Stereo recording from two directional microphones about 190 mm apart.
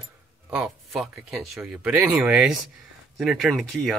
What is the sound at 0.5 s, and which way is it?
Speech, 5° right (ahead or behind).